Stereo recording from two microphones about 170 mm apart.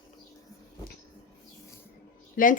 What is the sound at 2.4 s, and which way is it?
Speech, 55° left (ahead or behind).